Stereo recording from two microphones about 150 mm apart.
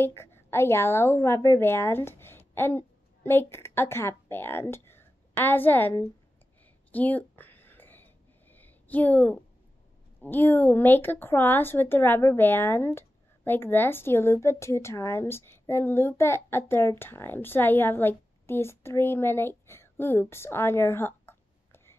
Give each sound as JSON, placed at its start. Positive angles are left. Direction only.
{"t": 0.0, "sound": "a woman's voice", "side_deg": 15}
{"t": 6.9, "sound": "a sound", "side_deg": 10}
{"t": 10.2, "sound": "a woman's voice", "side_deg": 15}